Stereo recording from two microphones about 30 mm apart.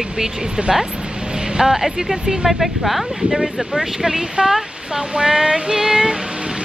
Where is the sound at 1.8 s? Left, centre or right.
Centre.